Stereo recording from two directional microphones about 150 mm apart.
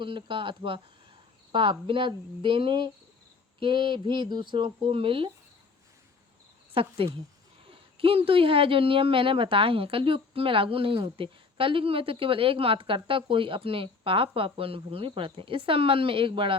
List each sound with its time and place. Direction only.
0.0 s speech: 35° right (ahead or behind)
6.7 s speech: 35° right (ahead or behind)